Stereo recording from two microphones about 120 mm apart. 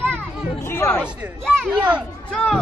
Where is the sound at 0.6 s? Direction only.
20° left (ahead or behind).